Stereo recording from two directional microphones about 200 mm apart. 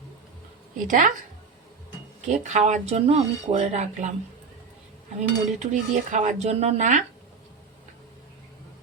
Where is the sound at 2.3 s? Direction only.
35° right (ahead or behind).